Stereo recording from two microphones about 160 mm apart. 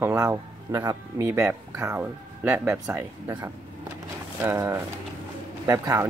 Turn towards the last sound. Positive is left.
turn(degrees=-15)  # may be behind; listen again after turning